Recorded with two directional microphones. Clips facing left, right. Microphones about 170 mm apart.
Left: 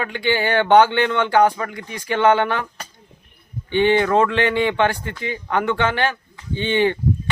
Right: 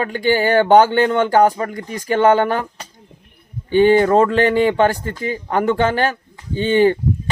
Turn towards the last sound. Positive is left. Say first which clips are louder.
# right 5 dB
turn(degrees=-40)  # may be behind; listen again after turning